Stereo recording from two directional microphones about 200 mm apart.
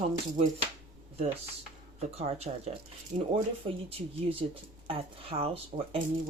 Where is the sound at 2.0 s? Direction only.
30° right (ahead or behind).